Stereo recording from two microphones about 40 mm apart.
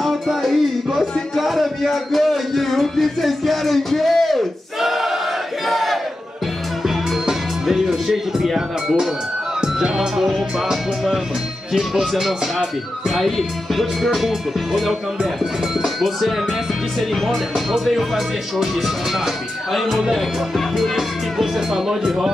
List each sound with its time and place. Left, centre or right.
0.0 s music: centre
4.7 s choir: centre
5.7 s battle cry: centre
6.8 s music: centre
9.6 s music: centre
9.9 s speech: centre
20.9 s speech: centre